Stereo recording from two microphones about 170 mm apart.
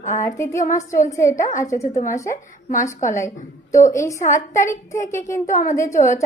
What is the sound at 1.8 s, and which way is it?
A woman's voice, 40° left (ahead or behind).